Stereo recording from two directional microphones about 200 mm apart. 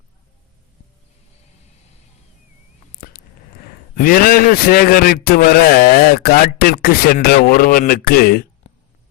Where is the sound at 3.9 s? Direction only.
45° left (ahead or behind).